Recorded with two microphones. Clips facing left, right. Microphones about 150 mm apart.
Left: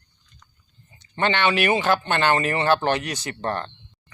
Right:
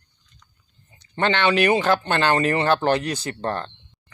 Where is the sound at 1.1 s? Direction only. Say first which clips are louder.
Right 2 dB; 40° right (ahead or behind).